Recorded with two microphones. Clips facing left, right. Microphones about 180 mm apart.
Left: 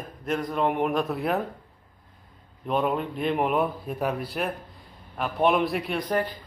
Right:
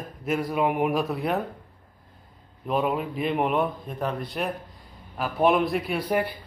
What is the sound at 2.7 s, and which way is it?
A man's voice, centre (ahead or behind).